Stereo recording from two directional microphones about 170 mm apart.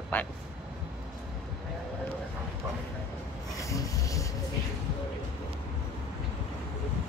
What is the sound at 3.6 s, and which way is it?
Rub, 20° left (ahead or behind).